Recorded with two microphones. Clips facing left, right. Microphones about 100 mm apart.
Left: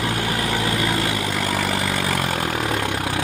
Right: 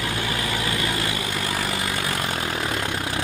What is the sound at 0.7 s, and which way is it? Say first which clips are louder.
Vehicle: left 4 dB; 55° left (ahead or behind).